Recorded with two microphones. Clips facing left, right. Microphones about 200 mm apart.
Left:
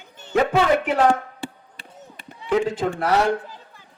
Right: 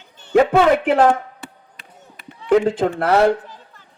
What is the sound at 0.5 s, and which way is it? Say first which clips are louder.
Speech: right 4 dB; 55° right (ahead or behind).